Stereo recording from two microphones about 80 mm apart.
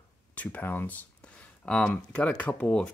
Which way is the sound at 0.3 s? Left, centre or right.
Centre.